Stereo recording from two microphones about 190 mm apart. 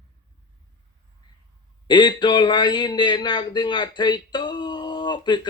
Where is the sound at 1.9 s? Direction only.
25° left (ahead or behind).